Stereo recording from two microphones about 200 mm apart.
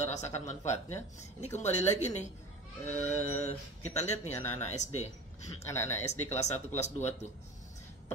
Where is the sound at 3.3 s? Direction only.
45° right (ahead or behind).